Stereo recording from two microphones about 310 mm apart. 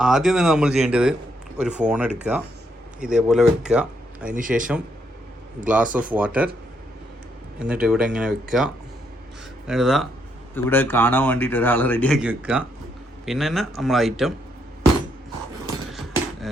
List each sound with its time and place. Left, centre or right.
0.0 s a man's voice: centre
4.3 s speech: right
5.6 s a man's voice: centre
7.6 s a man's voice: centre
15.9 s a sound: centre